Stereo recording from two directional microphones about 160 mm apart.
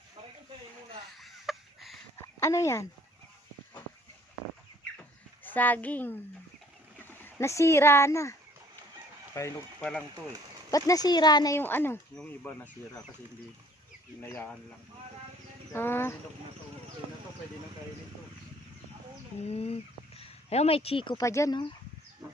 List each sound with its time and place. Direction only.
1.2 s a sound: centre (ahead or behind)
2.2 s a sound: 20° left (ahead or behind)
5.4 s a child's voice: 10° left (ahead or behind)
7.2 s speech: 15° left (ahead or behind)
10.7 s speech: 20° left (ahead or behind)
14.2 s speech: 15° left (ahead or behind)
15.7 s speech: 15° left (ahead or behind)
19.5 s speech: 40° left (ahead or behind)
21.2 s speech: 20° left (ahead or behind)